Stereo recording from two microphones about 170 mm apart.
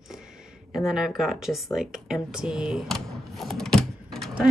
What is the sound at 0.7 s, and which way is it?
Speech, centre (ahead or behind).